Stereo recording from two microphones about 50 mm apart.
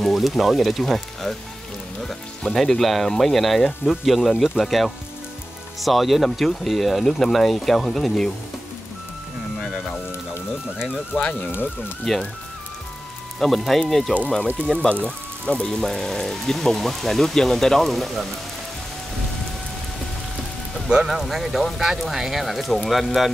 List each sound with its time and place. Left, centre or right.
0.0 s speech: centre
12.0 s speech: centre
13.4 s speech: centre; by 15.7 s left
15.7 s speech: centre
21.1 s speech: centre